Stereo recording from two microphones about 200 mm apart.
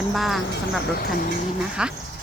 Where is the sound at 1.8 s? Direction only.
5° right (ahead or behind).